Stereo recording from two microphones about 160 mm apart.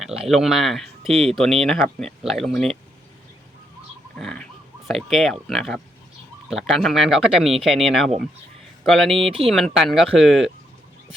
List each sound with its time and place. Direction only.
0.0 s speech: 5° right (ahead or behind)
4.2 s a sound: 5° left (ahead or behind)
4.9 s speech: centre (ahead or behind)
9.1 s speech: 35° right (ahead or behind)
9.5 s speech: centre (ahead or behind)